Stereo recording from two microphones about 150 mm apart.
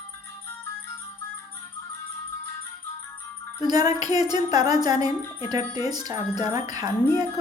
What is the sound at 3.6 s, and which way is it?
Music, 25° right (ahead or behind).